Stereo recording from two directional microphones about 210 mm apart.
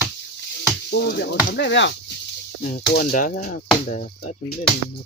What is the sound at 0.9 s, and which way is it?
Speech, 55° left (ahead or behind).